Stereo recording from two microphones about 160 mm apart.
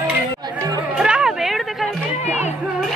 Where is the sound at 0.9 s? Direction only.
5° right (ahead or behind).